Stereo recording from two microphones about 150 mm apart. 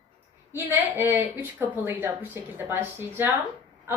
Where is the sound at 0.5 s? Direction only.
15° right (ahead or behind).